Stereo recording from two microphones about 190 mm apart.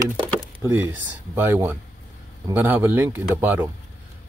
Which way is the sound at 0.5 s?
10° right (ahead or behind).